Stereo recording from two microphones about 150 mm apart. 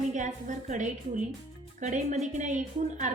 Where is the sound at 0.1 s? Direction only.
55° right (ahead or behind).